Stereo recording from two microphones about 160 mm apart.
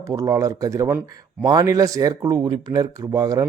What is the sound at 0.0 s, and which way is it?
Speech, 20° right (ahead or behind).